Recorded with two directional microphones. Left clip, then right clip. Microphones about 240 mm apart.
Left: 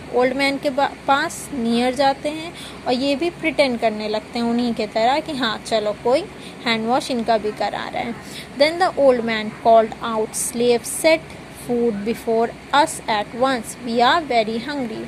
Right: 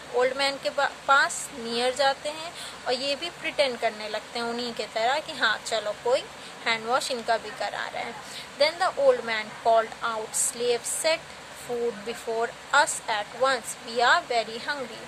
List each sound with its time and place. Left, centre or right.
0.2 s a woman's voice: centre